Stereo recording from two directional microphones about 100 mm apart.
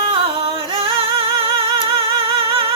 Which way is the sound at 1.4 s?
65° right (ahead or behind).